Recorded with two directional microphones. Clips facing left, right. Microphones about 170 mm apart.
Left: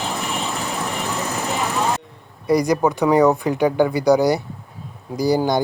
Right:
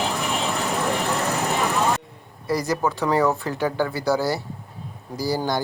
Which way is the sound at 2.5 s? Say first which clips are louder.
Left 6 dB; 15° left (ahead or behind).